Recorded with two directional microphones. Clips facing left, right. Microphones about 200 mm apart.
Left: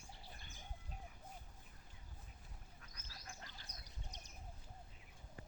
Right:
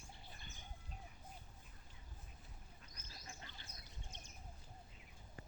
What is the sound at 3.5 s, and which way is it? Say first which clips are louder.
Duck: even; 40° left (ahead or behind).